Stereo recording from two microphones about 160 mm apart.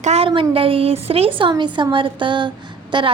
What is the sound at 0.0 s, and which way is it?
A woman's voice, 40° right (ahead or behind).